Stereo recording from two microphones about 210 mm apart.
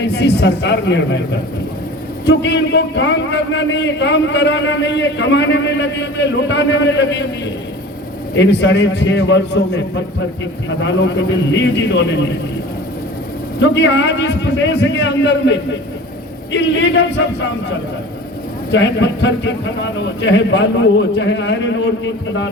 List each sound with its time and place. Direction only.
0.2 s a man's voice: 55° left (ahead or behind)
2.2 s a man's voice: 55° left (ahead or behind)
8.4 s a man's voice: 55° left (ahead or behind)
13.6 s a man's voice: 55° left (ahead or behind)
18.7 s a man's voice: 55° left (ahead or behind)